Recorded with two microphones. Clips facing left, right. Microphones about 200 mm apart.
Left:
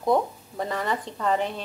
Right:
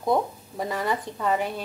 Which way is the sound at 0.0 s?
10° right (ahead or behind).